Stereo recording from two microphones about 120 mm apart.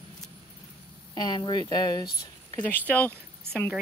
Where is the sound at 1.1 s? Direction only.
35° left (ahead or behind).